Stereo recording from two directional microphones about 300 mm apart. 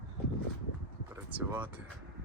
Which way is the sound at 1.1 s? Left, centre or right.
Centre.